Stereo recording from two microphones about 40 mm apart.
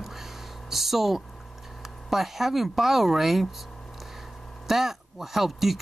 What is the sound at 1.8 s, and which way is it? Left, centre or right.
Speech, centre.